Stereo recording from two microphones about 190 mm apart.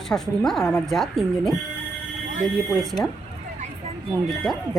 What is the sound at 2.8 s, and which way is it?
Speech, centre (ahead or behind).